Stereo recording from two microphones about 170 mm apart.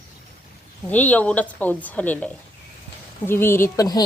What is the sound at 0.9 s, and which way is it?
A woman's voice, 10° left (ahead or behind).